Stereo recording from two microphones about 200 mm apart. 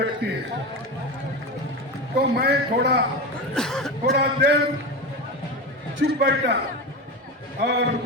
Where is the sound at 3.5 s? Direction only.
Centre (ahead or behind).